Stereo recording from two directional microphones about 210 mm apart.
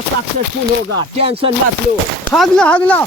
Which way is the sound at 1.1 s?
25° right (ahead or behind).